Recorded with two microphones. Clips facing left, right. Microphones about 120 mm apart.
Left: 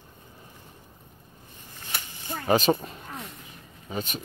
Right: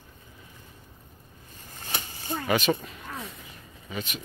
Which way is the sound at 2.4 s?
35° left (ahead or behind).